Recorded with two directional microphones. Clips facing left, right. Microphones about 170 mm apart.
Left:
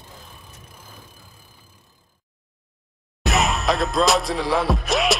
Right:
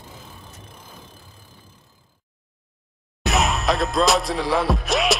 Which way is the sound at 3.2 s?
Centre (ahead or behind).